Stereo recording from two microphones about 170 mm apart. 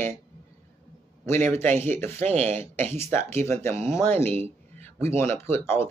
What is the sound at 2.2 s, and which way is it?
Speech, 40° right (ahead or behind).